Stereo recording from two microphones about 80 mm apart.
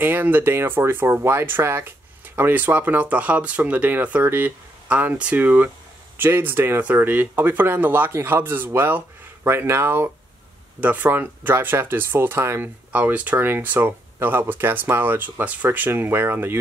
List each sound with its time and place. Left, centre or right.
0.0 s speech: right
12.9 s speech: centre